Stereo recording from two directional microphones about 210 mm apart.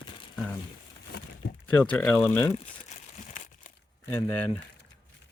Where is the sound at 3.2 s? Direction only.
35° left (ahead or behind).